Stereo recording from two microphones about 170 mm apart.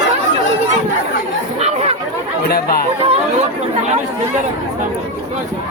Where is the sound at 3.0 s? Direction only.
35° right (ahead or behind).